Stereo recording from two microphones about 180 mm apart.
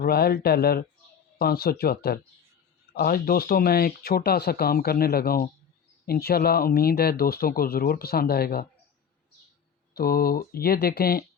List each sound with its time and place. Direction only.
0.0 s speech: 60° left (ahead or behind)
9.9 s speech: 55° left (ahead or behind)